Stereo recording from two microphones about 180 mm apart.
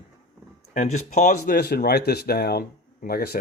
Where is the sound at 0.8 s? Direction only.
40° left (ahead or behind).